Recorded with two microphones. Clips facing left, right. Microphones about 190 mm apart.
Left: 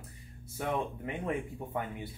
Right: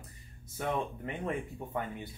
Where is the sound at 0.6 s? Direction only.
10° left (ahead or behind).